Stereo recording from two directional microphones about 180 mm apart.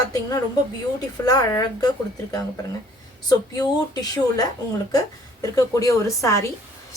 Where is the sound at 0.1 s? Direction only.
20° left (ahead or behind).